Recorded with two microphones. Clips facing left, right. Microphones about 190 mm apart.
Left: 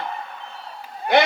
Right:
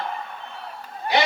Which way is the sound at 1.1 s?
55° left (ahead or behind).